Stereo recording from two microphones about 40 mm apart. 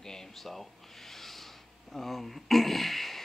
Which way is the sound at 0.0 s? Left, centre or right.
Centre.